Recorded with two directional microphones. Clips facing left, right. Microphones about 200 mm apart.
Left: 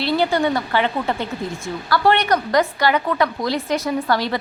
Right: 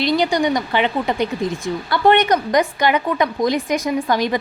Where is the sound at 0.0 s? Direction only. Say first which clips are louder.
Right 1 dB; 15° right (ahead or behind).